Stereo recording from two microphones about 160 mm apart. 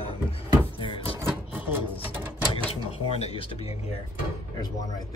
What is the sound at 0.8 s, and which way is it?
Cupboard open or close, 30° left (ahead or behind).